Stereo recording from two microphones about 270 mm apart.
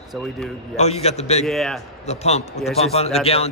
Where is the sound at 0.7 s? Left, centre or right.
Left.